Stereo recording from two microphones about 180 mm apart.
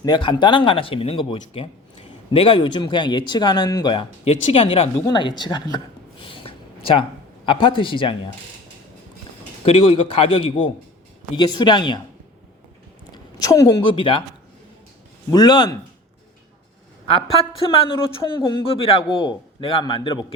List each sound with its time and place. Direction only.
0.0 s speech: 25° left (ahead or behind)
5.0 s a sound: 25° left (ahead or behind)
7.4 s speech: 25° left (ahead or behind)
9.6 s speech: 30° left (ahead or behind)
13.4 s speech: 20° left (ahead or behind)
15.3 s speech: 25° left (ahead or behind)
17.1 s speech: 30° left (ahead or behind)